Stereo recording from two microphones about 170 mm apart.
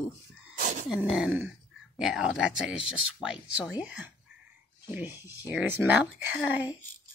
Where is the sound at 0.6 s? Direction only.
50° right (ahead or behind).